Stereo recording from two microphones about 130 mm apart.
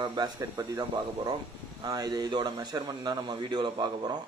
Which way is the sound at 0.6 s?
30° right (ahead or behind).